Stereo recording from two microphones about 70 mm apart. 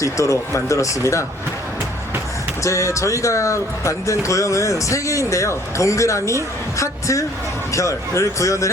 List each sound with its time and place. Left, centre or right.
0.0 s a man's voice: left
2.6 s a man's voice: left